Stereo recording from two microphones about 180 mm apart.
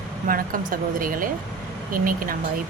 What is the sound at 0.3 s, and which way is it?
A woman's voice, 50° right (ahead or behind).